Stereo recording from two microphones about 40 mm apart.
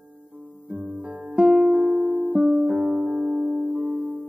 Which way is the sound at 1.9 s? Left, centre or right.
Centre.